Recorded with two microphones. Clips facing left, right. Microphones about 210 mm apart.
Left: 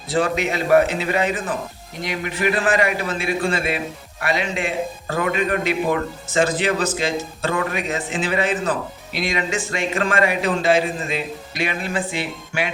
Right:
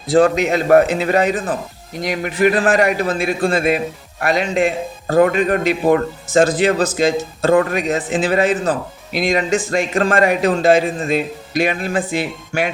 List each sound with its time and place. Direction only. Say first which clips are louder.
0.1 s a man's voice: right 7 dB; 40° right (ahead or behind)